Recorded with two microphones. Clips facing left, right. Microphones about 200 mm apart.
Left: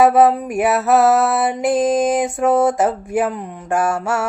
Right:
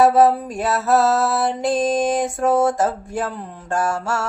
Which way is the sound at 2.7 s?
20° left (ahead or behind).